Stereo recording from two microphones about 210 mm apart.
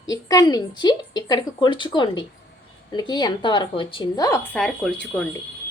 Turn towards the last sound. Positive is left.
turn(degrees=5)  # may be behind; listen again after turning